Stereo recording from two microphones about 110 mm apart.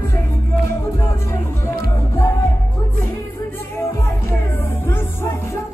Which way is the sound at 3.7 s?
20° left (ahead or behind).